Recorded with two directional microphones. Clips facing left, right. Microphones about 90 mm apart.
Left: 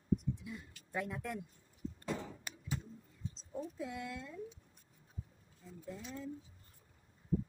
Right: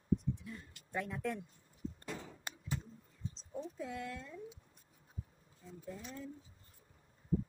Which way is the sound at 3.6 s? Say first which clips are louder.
Right 1 dB; 5° left (ahead or behind).